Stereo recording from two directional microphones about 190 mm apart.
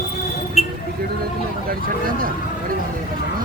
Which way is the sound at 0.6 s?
35° left (ahead or behind).